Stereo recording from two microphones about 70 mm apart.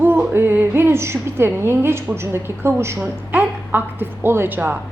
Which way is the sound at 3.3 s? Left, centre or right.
Right.